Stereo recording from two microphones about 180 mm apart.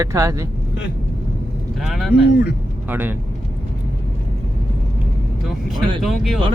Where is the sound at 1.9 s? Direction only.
Centre (ahead or behind).